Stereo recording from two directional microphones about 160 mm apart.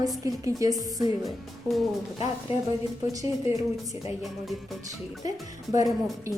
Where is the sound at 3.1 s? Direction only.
20° right (ahead or behind).